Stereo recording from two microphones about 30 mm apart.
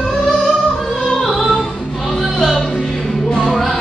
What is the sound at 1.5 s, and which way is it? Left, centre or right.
Music, centre.